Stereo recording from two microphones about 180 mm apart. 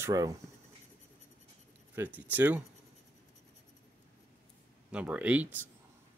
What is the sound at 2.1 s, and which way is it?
Speech, 10° right (ahead or behind).